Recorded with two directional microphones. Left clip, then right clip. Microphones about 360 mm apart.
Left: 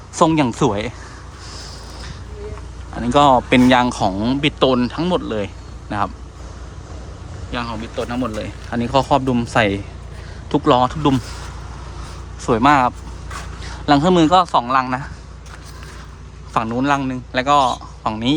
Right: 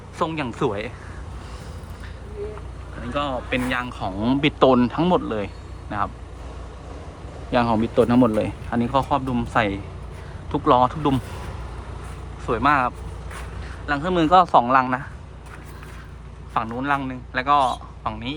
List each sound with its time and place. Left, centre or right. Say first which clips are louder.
0.2 s speech: left 9 dB; centre
3.1 s speech: left 13 dB; centre
7.5 s speech: right 6 dB; centre
12.5 s speech: left 6 dB; centre
16.6 s speech: left 5 dB; centre